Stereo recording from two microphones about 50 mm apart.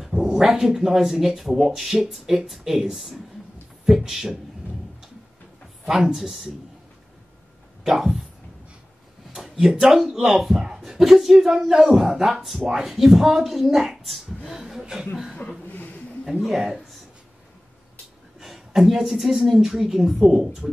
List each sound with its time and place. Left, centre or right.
0.2 s speech: centre
5.9 s speech: centre
6.1 s speech: centre
7.8 s a sound: centre
9.6 s speech: centre
16.3 s speech: centre
18.4 s speech: centre